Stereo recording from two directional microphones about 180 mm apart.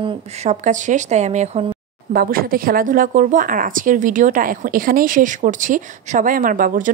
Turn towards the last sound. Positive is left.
turn(degrees=-50)  # may be behind; listen again after turning